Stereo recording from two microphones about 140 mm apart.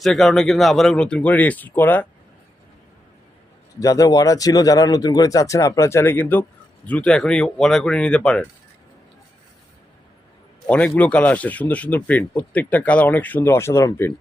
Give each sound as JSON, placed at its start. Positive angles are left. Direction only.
{"t": 0.0, "sound": "speech", "side_deg": 0}
{"t": 3.8, "sound": "speech", "side_deg": 25}
{"t": 10.7, "sound": "speech", "side_deg": 10}